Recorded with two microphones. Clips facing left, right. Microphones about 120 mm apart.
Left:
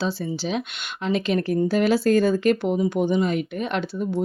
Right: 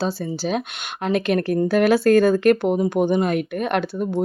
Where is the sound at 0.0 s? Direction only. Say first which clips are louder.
Right 2 dB; 45° right (ahead or behind).